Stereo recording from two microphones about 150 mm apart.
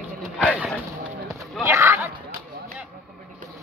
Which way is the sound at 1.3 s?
20° right (ahead or behind).